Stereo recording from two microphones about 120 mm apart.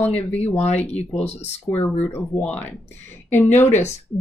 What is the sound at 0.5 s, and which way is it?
Speech, 65° left (ahead or behind).